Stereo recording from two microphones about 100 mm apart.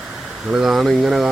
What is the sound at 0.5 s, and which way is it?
Speech, 5° right (ahead or behind).